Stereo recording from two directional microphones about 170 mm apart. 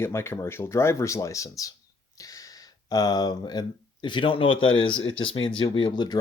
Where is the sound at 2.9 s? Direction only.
25° left (ahead or behind).